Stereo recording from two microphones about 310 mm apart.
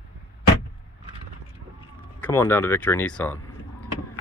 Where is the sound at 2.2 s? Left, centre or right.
Centre.